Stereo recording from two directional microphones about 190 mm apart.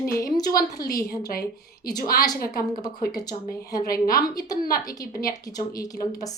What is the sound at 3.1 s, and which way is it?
A child's voice, 20° left (ahead or behind).